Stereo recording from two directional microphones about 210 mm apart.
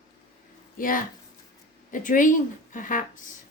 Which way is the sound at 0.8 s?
40° left (ahead or behind).